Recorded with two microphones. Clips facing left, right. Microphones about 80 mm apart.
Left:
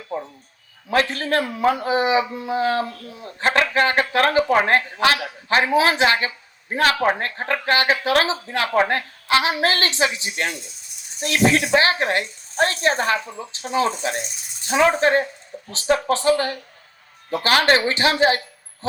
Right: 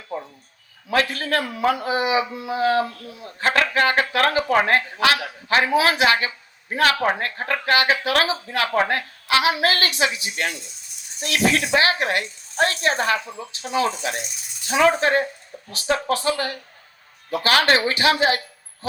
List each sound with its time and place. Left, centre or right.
0.9 s a woman's voice: left